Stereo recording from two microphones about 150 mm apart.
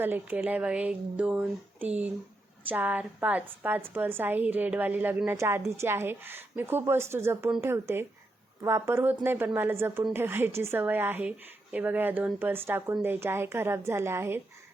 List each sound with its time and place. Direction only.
0.0 s a woman's voice: 10° right (ahead or behind)